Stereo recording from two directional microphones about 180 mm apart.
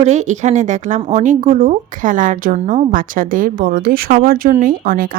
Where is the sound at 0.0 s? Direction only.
40° right (ahead or behind).